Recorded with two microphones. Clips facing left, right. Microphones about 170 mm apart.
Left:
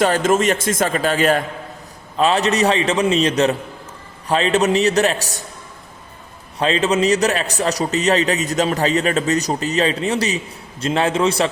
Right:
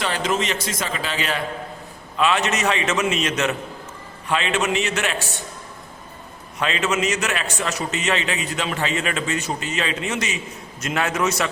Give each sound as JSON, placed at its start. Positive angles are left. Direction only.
{"t": 0.0, "sound": "a man's voice", "side_deg": 45}
{"t": 2.1, "sound": "a man's voice", "side_deg": 35}
{"t": 6.6, "sound": "a man's voice", "side_deg": 35}